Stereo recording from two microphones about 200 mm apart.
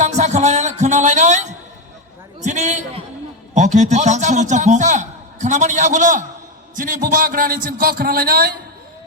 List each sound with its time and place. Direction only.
0.0 s music: 35° right (ahead or behind)
2.4 s a man's voice: 35° right (ahead or behind)